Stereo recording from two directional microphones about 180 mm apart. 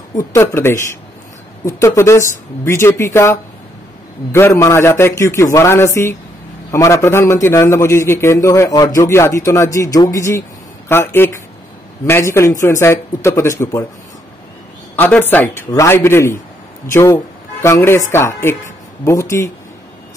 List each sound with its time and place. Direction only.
0.1 s a man's voice: 15° left (ahead or behind)
15.0 s a man's voice: 10° left (ahead or behind)